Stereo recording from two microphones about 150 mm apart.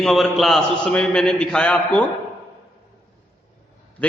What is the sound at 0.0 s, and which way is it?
A man's voice, centre (ahead or behind).